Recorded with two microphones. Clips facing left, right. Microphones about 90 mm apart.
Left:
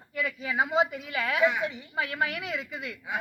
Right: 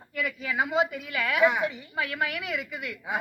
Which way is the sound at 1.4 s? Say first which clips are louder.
Right 3 dB; 15° right (ahead or behind).